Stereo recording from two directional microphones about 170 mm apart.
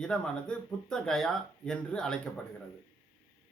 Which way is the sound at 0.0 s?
5° left (ahead or behind).